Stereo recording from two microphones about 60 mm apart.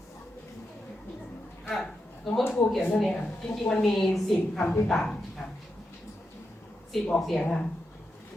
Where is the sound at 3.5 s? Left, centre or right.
Centre.